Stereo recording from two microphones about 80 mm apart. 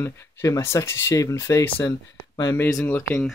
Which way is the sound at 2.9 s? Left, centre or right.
Left.